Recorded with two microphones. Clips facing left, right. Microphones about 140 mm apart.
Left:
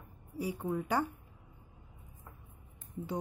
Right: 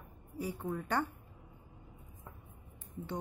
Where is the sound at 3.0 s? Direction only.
25° left (ahead or behind).